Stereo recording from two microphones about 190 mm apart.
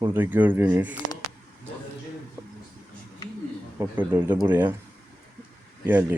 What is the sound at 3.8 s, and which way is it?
Speech, 10° right (ahead or behind).